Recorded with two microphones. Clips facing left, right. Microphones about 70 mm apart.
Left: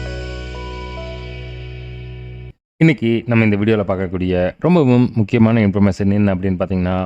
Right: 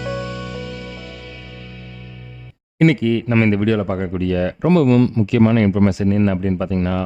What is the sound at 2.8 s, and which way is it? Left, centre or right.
Speech, left.